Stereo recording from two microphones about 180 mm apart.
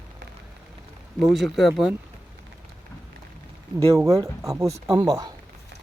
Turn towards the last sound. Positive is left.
turn(degrees=-20)  # may be behind; listen again after turning